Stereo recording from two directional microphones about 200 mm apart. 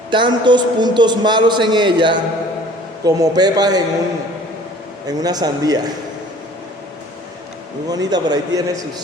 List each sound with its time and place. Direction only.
0.1 s a man's voice: 25° right (ahead or behind)
5.0 s a man's voice: 20° right (ahead or behind)
7.9 s a man's voice: 20° right (ahead or behind)